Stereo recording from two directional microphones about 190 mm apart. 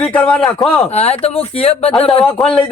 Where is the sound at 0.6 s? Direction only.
35° left (ahead or behind).